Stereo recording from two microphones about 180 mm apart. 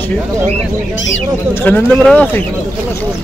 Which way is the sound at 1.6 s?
5° left (ahead or behind).